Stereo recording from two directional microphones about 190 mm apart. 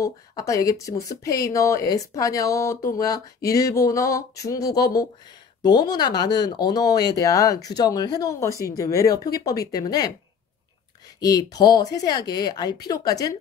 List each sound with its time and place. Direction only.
0.0 s speech: 15° left (ahead or behind)
11.1 s speech: 20° left (ahead or behind)